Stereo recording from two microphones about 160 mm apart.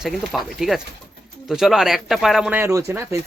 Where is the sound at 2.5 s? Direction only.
15° right (ahead or behind).